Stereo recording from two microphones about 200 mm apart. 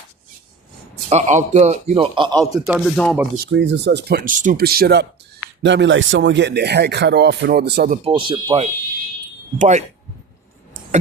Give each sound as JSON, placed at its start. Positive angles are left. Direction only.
{"t": 1.1, "sound": "a man's voice", "side_deg": -35}
{"t": 2.6, "sound": "speech", "side_deg": 0}
{"t": 3.3, "sound": "speech", "side_deg": -60}
{"t": 5.6, "sound": "a man's voice", "side_deg": -65}
{"t": 7.9, "sound": "a man's voice", "side_deg": -25}